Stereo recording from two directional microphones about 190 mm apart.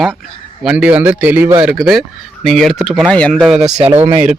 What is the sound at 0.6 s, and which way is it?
Speech, 5° right (ahead or behind).